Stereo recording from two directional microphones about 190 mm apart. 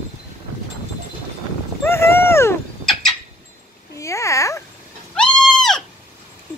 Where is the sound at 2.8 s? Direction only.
Centre (ahead or behind).